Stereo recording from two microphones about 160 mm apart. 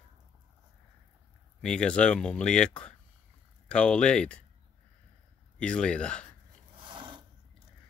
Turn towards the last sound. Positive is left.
turn(degrees=-30)  # may be behind; listen again after turning